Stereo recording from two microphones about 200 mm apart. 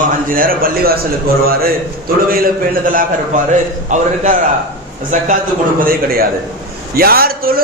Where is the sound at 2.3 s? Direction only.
45° right (ahead or behind).